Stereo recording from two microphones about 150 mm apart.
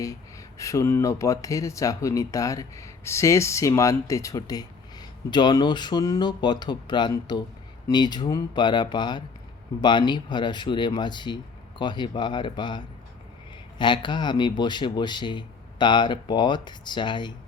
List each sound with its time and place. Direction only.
0.0 s speech: 20° left (ahead or behind)